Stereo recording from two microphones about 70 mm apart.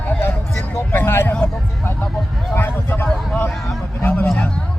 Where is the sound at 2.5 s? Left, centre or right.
Left.